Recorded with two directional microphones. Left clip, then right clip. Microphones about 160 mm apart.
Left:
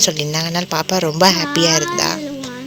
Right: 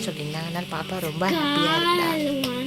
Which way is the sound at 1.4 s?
5° left (ahead or behind).